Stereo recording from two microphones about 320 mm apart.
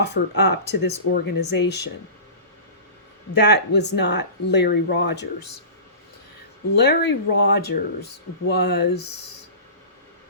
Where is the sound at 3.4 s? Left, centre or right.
Left.